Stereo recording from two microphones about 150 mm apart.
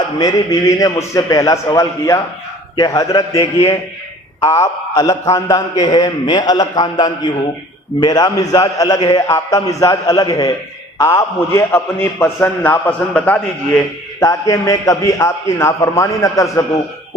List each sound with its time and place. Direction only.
0.2 s a man's voice: 25° left (ahead or behind); by 13.8 s 10° left (ahead or behind)
14.2 s a man's voice: 20° left (ahead or behind)